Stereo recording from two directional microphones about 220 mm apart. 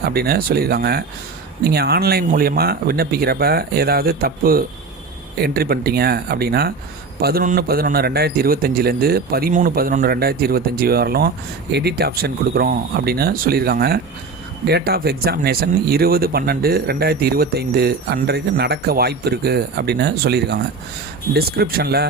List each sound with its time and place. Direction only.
0.0 s speech: 45° right (ahead or behind)